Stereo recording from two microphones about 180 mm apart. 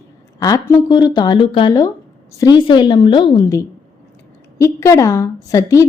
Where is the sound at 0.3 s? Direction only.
20° left (ahead or behind).